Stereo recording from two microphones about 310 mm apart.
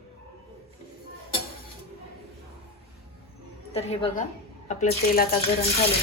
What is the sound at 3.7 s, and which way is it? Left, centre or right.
A woman's voice, centre.